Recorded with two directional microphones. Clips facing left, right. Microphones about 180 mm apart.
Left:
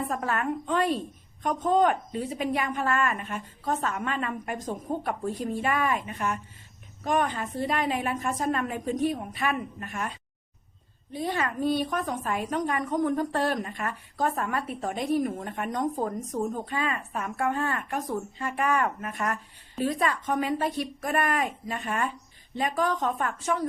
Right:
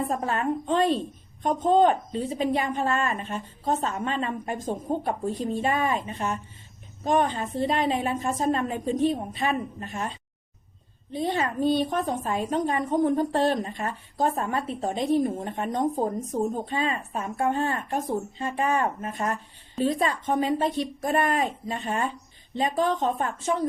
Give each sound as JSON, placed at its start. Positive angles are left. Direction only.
{"t": 0.1, "sound": "a woman's voice", "side_deg": -25}
{"t": 11.1, "sound": "a woman's voice", "side_deg": -25}